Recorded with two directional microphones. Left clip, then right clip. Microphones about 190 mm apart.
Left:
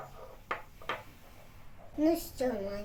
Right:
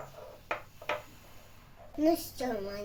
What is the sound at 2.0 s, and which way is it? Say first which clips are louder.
Speech: even; 5° left (ahead or behind).